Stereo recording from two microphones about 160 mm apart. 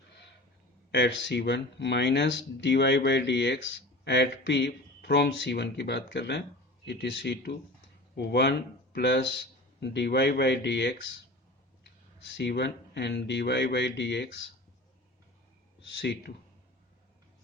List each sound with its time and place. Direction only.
0.9 s speech: 90° left
12.4 s speech: 90° left
16.0 s speech: 90° left